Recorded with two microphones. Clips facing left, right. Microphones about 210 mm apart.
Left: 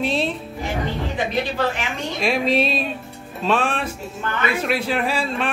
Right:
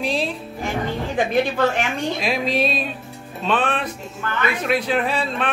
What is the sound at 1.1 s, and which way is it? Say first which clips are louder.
Speech: right 6 dB; 50° right (ahead or behind).